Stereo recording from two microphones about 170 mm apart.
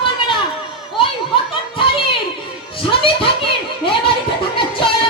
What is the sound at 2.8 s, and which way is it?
Music, 30° left (ahead or behind).